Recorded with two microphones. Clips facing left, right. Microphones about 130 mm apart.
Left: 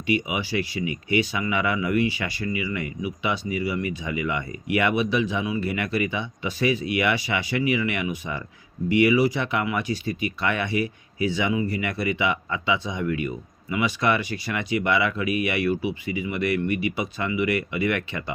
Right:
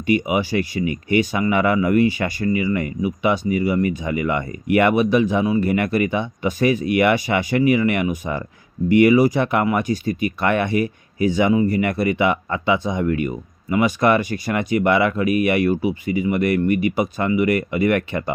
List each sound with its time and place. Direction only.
0.1 s speech: 45° right (ahead or behind)